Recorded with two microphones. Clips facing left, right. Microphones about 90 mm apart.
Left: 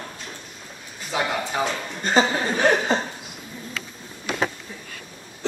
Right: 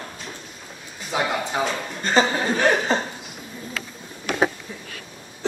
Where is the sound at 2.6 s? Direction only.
20° left (ahead or behind).